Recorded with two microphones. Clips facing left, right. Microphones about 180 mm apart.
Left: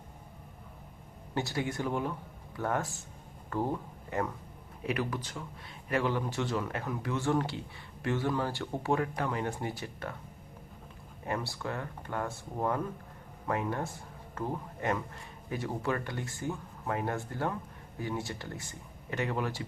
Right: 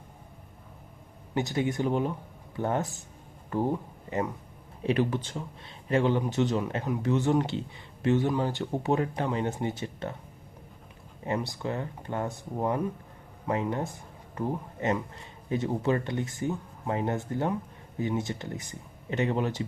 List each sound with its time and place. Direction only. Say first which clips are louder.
1.3 s speech: right 5 dB; 20° right (ahead or behind)
4.8 s speech: right 7 dB; 30° right (ahead or behind)
11.3 s speech: right 4 dB; 20° right (ahead or behind)